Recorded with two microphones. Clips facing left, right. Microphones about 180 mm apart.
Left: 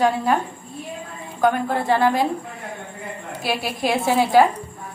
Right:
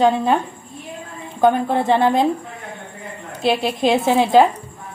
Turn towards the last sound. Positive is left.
turn(degrees=-20)  # may be behind; listen again after turning